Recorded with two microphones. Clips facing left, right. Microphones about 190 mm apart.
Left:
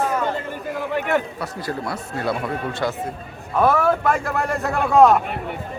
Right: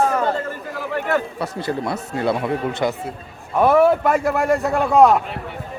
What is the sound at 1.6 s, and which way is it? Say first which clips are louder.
Speech: right 3 dB; 25° right (ahead or behind).